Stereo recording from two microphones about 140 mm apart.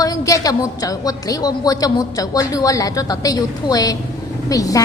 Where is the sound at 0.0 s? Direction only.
25° left (ahead or behind).